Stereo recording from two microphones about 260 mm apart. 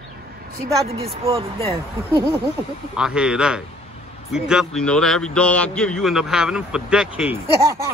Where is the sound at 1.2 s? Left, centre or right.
Right.